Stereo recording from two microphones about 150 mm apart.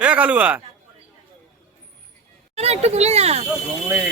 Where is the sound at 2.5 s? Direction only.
45° right (ahead or behind).